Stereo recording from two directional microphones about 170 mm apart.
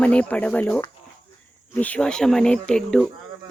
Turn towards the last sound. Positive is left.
turn(degrees=5)  # may be behind; listen again after turning